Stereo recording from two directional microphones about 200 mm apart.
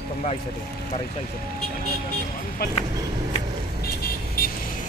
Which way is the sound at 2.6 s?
50° left (ahead or behind).